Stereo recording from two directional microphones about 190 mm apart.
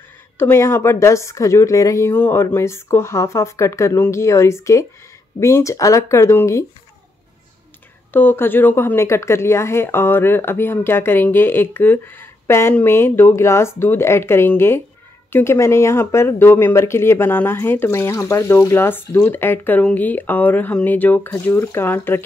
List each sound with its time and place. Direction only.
0.4 s speech: 15° left (ahead or behind)
8.1 s speech: 10° left (ahead or behind)